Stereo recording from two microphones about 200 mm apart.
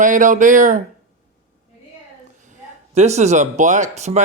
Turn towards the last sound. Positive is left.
turn(degrees=-35)  # may be behind; listen again after turning